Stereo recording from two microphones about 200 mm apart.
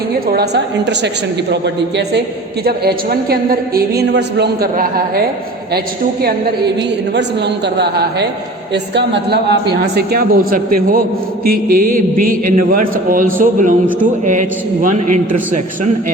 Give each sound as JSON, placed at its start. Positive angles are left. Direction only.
{"t": 0.3, "sound": "a woman's voice", "side_deg": -55}
{"t": 7.1, "sound": "a woman's voice", "side_deg": -60}